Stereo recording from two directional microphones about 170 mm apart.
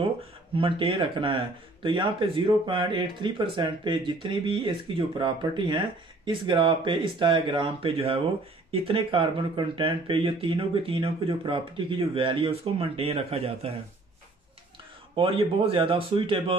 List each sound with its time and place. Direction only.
0.6 s speech: 30° right (ahead or behind)
15.1 s speech: 30° right (ahead or behind)